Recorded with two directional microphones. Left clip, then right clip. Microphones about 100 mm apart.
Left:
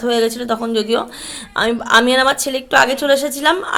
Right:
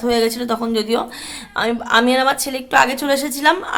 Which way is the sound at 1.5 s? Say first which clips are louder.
Left 3 dB; 30° left (ahead or behind).